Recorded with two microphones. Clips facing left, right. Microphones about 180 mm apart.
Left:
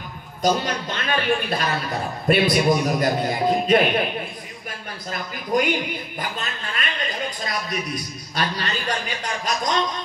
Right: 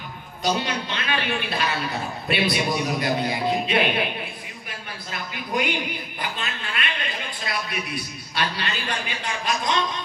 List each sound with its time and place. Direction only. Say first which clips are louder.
0.4 s a man's voice: left 3 dB; 45° left (ahead or behind)
5.1 s a man's voice: left 5 dB; 45° left (ahead or behind)